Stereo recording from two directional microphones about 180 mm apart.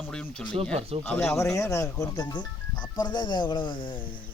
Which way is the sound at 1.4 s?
15° left (ahead or behind).